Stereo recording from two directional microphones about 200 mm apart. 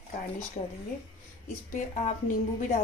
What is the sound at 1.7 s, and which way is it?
A woman's voice, 40° left (ahead or behind).